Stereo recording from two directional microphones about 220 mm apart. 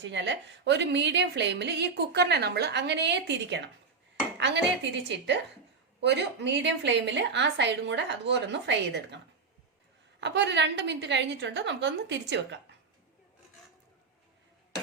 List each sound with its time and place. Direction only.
0.0 s a woman's voice: 55° right (ahead or behind)